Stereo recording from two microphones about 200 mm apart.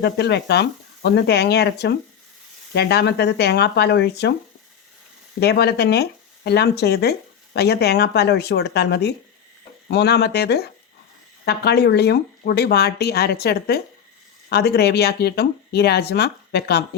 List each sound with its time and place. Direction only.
0.0 s speech: 55° left (ahead or behind)
5.4 s speech: 55° left (ahead or behind)